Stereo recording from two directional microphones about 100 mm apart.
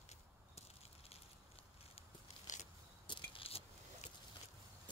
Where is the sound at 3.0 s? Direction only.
55° left (ahead or behind); by 4.0 s 75° left (ahead or behind).